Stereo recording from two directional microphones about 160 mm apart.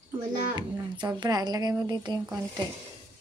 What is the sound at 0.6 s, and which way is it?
A woman's voice, 30° right (ahead or behind).